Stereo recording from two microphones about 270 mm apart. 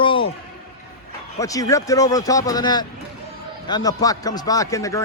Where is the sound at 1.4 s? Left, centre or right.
Centre.